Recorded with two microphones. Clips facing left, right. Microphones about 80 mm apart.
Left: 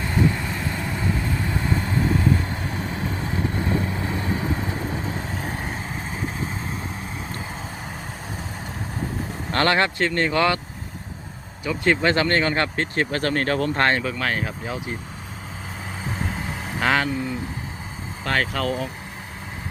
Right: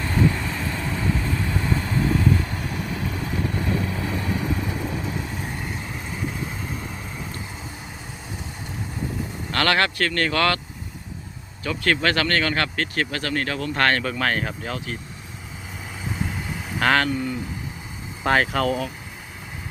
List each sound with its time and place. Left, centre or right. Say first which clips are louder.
0.0 s vehicle: even; centre
9.5 s speech: left 1 dB; left
11.6 s speech: left 2 dB; centre; by 13.7 s left
13.7 s speech: right 2 dB; left
14.0 s speech: right 1 dB; centre
16.0 s vehicle: even; left
16.8 s speech: right 1 dB; centre
18.2 s speech: right 4 dB; centre